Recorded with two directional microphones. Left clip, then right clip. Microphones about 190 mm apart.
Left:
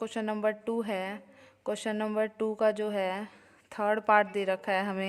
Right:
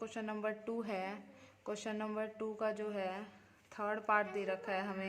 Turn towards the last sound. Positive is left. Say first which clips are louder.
# left 9 dB
turn(degrees=45)  # may be behind; listen again after turning